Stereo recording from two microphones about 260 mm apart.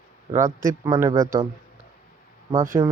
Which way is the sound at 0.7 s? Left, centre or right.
Centre.